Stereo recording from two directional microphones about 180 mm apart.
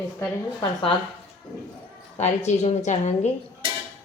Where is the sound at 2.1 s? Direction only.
40° left (ahead or behind).